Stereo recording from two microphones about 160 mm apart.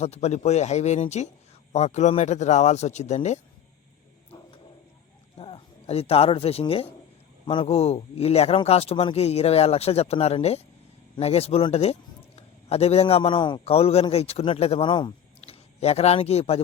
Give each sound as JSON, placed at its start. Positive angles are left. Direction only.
{"t": 0.0, "sound": "a man's voice", "side_deg": 45}
{"t": 5.4, "sound": "a man's voice", "side_deg": 35}
{"t": 15.4, "sound": "speech", "side_deg": 40}